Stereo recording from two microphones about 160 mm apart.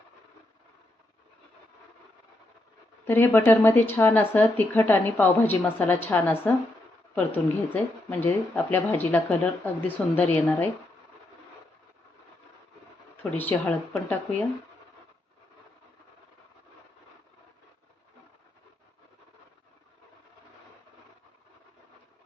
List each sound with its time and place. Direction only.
3.1 s speech: 15° left (ahead or behind)
13.3 s speech: 10° left (ahead or behind)